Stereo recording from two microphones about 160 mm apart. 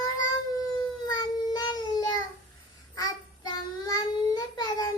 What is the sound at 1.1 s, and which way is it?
Child singing, 25° left (ahead or behind).